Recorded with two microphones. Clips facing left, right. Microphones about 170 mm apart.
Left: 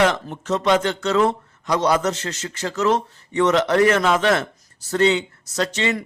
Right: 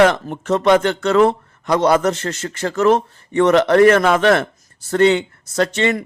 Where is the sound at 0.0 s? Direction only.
55° right (ahead or behind).